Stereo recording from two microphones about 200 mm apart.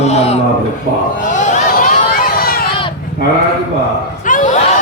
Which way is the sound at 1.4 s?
40° left (ahead or behind).